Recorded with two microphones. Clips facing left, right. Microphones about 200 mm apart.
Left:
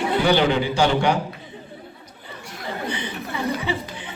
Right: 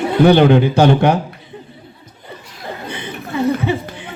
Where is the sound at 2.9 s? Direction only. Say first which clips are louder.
Right 6 dB; 55° right (ahead or behind).